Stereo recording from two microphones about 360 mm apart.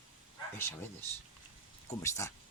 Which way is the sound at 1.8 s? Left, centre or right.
Centre.